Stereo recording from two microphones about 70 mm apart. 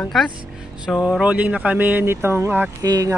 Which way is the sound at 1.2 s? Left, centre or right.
Right.